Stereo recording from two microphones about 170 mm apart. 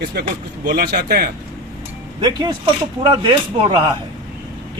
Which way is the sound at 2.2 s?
25° right (ahead or behind).